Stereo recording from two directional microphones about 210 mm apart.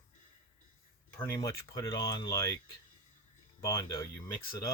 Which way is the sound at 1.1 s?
15° left (ahead or behind).